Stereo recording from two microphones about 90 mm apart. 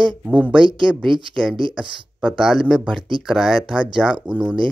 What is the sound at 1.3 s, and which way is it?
Speech, 5° left (ahead or behind).